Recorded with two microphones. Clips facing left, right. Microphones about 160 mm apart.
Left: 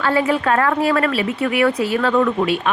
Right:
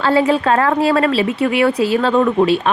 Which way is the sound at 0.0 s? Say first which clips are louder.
Right 3 dB; 30° right (ahead or behind).